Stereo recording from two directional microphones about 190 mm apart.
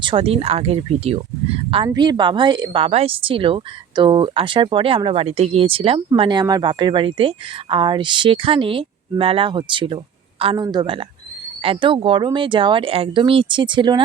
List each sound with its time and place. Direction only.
0.0 s speech: 30° right (ahead or behind)